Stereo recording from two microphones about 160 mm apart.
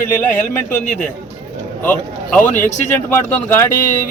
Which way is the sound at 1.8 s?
10° left (ahead or behind).